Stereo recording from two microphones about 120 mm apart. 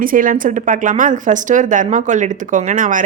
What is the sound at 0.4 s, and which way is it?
A woman's voice, 90° right.